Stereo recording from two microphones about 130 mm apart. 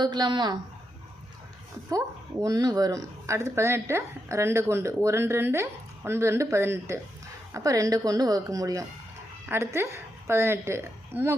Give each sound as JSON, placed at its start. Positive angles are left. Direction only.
{"t": 0.0, "sound": "a woman's voice", "side_deg": -35}
{"t": 1.9, "sound": "a woman's voice", "side_deg": -25}